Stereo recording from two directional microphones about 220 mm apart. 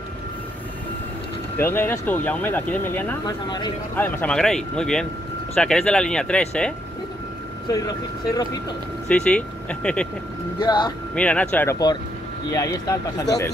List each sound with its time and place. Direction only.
1.6 s speech: 10° left (ahead or behind)
3.4 s speech: 20° left (ahead or behind)
3.9 s speech: 5° left (ahead or behind)
7.6 s speech: 15° left (ahead or behind)
9.1 s speech: 5° left (ahead or behind)
10.6 s speech: 20° left (ahead or behind)
11.1 s speech: 5° left (ahead or behind)